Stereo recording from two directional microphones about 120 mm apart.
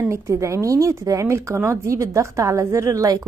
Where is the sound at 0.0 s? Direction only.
25° right (ahead or behind).